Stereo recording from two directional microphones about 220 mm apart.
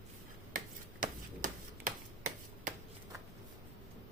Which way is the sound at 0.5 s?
35° right (ahead or behind).